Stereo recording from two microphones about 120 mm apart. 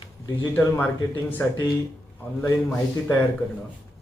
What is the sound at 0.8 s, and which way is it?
Speech, 15° left (ahead or behind).